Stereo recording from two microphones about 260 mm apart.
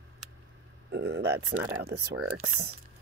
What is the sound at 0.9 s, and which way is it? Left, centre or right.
Speech, right.